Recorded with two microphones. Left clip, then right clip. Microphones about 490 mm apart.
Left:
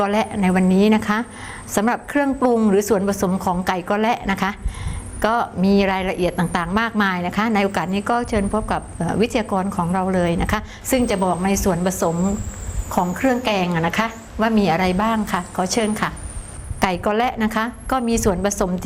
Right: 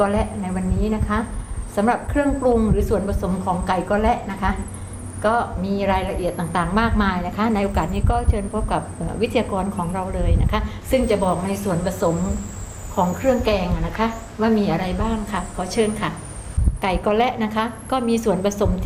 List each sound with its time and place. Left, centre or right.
0.0 s a woman's voice: left
13.2 s a woman's voice: left